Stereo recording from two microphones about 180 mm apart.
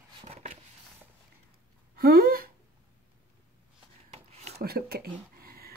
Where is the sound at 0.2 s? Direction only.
35° right (ahead or behind).